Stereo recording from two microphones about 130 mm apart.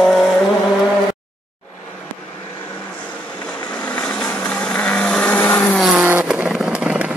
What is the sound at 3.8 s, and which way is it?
Vehicle, 10° left (ahead or behind).